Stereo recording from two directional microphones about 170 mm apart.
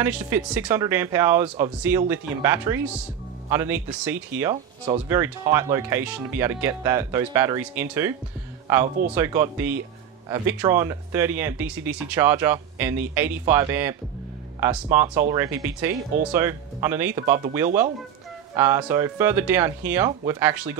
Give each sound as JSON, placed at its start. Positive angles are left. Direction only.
{"t": 0.0, "sound": "speech", "side_deg": -10}
{"t": 18.6, "sound": "speech", "side_deg": -15}